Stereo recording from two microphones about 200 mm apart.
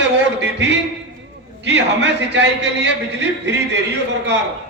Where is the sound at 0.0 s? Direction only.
60° right (ahead or behind).